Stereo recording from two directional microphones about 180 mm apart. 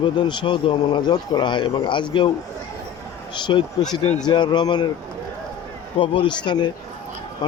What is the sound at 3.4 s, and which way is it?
Speech, 25° left (ahead or behind).